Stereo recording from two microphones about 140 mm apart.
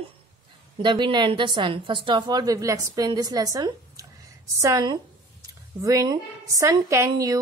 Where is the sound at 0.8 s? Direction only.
35° right (ahead or behind).